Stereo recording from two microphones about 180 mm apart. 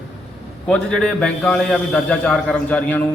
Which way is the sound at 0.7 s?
5° left (ahead or behind).